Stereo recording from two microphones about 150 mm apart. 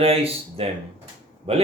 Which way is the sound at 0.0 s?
40° right (ahead or behind).